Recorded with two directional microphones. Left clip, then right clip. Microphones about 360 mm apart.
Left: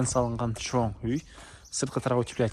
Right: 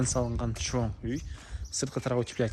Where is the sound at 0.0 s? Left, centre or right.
Centre.